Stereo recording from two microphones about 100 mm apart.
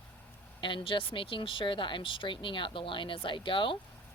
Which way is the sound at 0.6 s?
55° left (ahead or behind).